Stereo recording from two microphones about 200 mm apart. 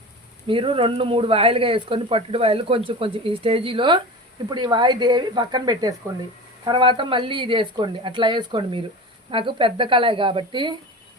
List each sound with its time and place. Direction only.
0.4 s speech: 25° right (ahead or behind)